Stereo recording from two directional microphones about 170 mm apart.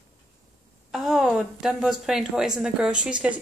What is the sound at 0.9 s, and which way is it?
Speech, centre (ahead or behind).